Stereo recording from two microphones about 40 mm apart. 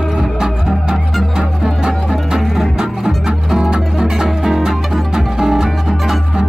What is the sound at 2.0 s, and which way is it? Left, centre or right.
Music, centre.